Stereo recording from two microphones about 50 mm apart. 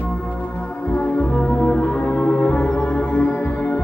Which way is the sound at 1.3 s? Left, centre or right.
Centre.